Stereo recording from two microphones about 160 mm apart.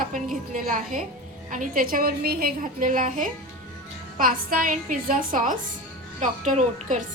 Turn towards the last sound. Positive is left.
turn(degrees=-50)  # may be behind; listen again after turning